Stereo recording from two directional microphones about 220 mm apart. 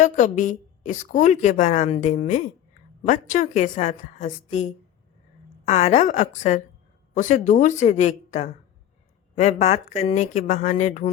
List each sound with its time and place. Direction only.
0.0 s a woman's voice: 35° left (ahead or behind)